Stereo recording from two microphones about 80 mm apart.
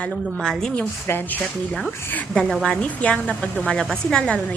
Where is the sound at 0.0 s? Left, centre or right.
Centre.